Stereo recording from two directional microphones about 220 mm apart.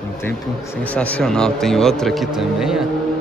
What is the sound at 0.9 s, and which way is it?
A man's voice, 5° left (ahead or behind).